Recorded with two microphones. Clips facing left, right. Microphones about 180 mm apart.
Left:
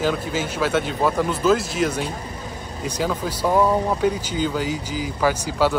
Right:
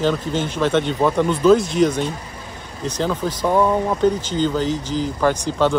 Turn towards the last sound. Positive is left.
turn(degrees=5)  # may be behind; listen again after turning